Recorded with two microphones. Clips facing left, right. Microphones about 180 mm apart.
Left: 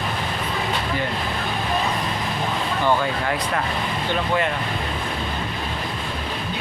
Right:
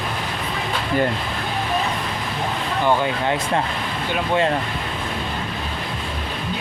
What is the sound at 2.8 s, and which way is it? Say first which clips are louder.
Speech: right 2 dB; 25° right (ahead or behind).